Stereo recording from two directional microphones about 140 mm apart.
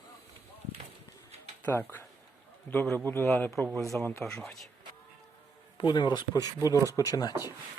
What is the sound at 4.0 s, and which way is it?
Speech, 20° left (ahead or behind).